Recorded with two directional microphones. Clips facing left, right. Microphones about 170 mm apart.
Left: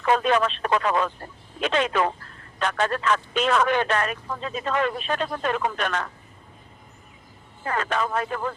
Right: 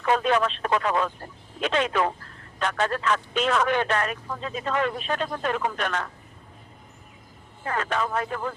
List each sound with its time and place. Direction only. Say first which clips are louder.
0.0 s speech: left 1 dB; 75° left (ahead or behind)
7.7 s speech: left 1 dB; 70° left (ahead or behind)